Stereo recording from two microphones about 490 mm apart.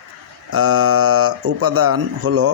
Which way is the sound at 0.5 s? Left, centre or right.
Right.